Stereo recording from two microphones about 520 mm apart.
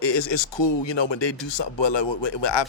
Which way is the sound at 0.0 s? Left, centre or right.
Left.